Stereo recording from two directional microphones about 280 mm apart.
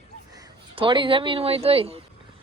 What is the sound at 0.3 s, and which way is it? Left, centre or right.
Speech, centre.